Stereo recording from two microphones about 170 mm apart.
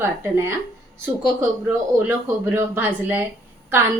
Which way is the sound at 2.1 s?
15° right (ahead or behind).